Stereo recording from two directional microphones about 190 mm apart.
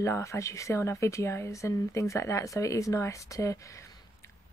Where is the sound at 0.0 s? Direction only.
15° left (ahead or behind).